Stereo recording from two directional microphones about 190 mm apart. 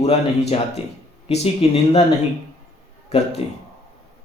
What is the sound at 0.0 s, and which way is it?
Speech, 30° left (ahead or behind).